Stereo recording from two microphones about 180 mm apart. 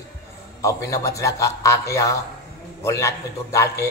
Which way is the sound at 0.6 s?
15° left (ahead or behind).